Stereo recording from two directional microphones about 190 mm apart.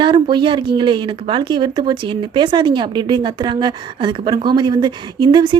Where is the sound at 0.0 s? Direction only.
25° right (ahead or behind).